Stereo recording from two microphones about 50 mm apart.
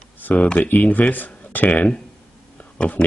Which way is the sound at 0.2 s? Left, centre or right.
Left.